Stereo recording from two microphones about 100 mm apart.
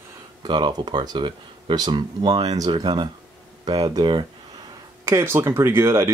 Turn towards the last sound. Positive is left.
turn(degrees=-25)  # may be behind; listen again after turning